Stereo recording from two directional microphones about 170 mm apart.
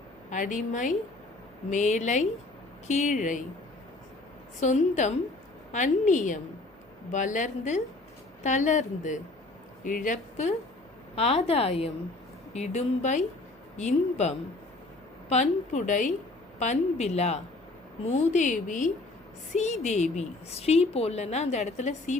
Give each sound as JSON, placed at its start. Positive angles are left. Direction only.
{"t": 0.3, "sound": "a woman's voice", "side_deg": 50}
{"t": 4.6, "sound": "a woman's voice", "side_deg": 45}